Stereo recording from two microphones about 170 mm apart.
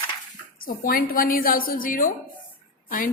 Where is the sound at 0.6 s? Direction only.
55° left (ahead or behind).